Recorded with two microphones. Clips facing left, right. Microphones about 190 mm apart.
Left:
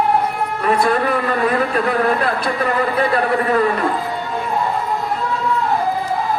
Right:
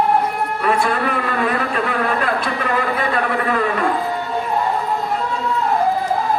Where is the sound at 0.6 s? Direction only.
40° left (ahead or behind).